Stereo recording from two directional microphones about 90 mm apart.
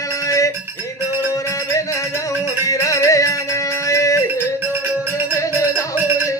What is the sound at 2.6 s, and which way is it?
Music, 40° left (ahead or behind).